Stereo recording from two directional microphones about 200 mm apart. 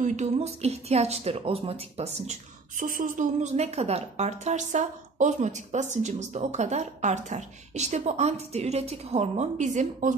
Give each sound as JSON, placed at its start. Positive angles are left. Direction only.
{"t": 0.0, "sound": "a woman's voice", "side_deg": -35}
{"t": 2.8, "sound": "a woman's voice", "side_deg": -40}